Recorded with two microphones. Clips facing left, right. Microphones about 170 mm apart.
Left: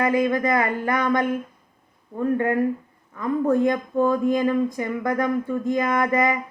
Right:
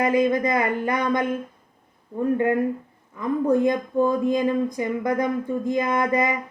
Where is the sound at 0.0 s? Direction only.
20° right (ahead or behind).